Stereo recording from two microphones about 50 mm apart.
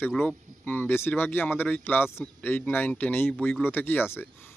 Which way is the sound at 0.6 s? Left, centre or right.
Left.